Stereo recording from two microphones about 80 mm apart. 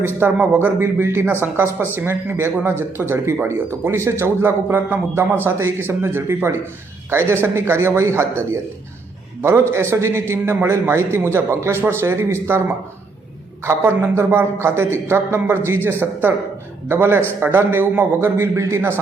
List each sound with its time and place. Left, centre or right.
0.0 s speech: right
0.8 s a man's voice: right